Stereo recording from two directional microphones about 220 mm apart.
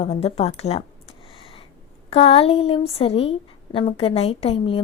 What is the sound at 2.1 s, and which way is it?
Speech, 25° left (ahead or behind).